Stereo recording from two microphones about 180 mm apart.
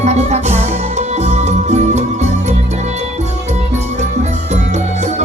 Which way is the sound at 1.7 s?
40° right (ahead or behind).